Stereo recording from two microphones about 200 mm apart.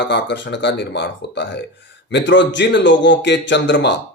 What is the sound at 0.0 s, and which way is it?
Speech, 60° left (ahead or behind).